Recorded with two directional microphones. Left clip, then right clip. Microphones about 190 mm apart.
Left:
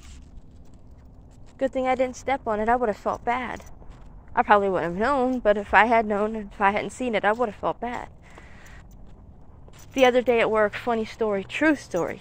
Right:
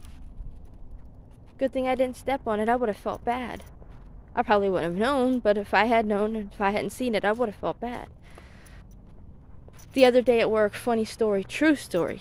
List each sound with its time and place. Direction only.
1.6 s a woman's voice: 15° right (ahead or behind)
2.9 s speech: 10° right (ahead or behind)
3.3 s a woman's voice: 25° right (ahead or behind)
9.9 s a woman's voice: 35° right (ahead or behind)